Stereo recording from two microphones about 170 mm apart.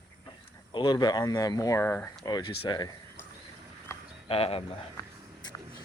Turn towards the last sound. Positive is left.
turn(degrees=35)  # may be behind; listen again after turning